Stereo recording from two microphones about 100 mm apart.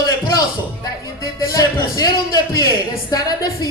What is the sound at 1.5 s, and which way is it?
Speech, 35° left (ahead or behind).